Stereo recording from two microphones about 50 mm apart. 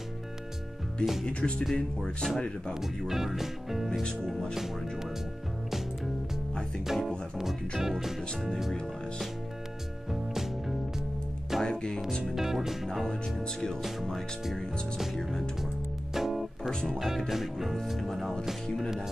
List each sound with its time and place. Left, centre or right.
1.2 s speech: left
1.6 s speech: centre
2.7 s speech: centre
6.9 s speech: centre
10.3 s music: centre
11.6 s music: centre
12.4 s speech: centre
13.4 s speech: centre
14.4 s speech: centre
15.6 s music: centre
16.8 s speech: centre